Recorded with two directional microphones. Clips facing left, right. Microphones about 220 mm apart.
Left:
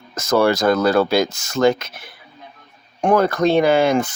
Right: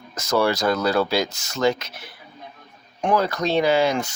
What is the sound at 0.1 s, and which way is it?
Speech, 50° left (ahead or behind).